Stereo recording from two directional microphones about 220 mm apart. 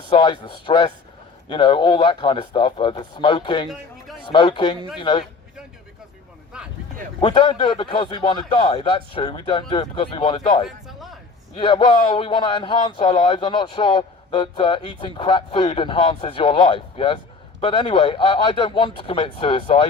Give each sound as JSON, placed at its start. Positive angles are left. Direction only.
{"t": 0.1, "sound": "speech", "side_deg": 20}
{"t": 7.2, "sound": "speech", "side_deg": 20}
{"t": 10.7, "sound": "a sound", "side_deg": 0}
{"t": 11.5, "sound": "speech", "side_deg": 20}